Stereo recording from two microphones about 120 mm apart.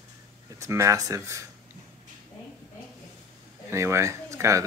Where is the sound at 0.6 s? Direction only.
25° right (ahead or behind).